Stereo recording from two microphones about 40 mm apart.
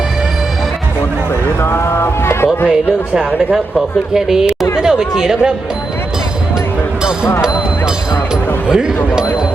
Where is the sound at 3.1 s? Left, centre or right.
Centre.